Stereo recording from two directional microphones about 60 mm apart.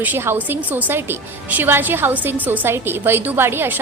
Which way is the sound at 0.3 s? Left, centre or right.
Right.